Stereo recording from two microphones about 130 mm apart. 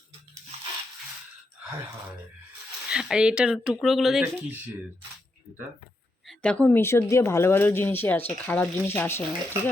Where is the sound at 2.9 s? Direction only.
5° right (ahead or behind).